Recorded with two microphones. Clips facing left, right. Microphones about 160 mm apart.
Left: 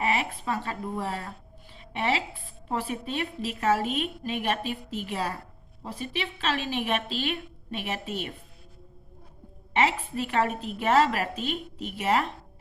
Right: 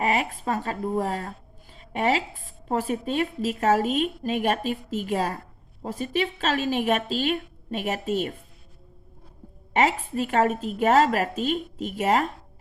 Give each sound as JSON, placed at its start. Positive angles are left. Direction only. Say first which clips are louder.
{"t": 0.0, "sound": "a woman's voice", "louder": "right 3 dB", "side_deg": -40}
{"t": 9.7, "sound": "a woman's voice", "louder": "right 3 dB", "side_deg": -40}